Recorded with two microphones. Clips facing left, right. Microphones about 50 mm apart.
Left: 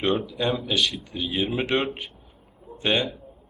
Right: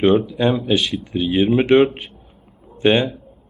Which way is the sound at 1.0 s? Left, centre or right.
Centre.